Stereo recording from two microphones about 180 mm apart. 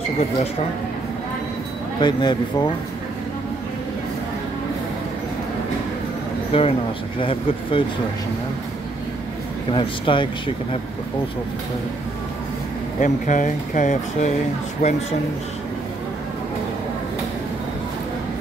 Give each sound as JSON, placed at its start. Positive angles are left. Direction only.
{"t": 2.0, "sound": "speech", "side_deg": 25}
{"t": 6.5, "sound": "speech", "side_deg": 30}
{"t": 9.7, "sound": "speech", "side_deg": 25}
{"t": 13.0, "sound": "speech", "side_deg": 45}